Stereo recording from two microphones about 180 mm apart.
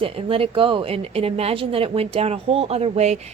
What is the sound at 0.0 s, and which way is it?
Speech, 30° right (ahead or behind).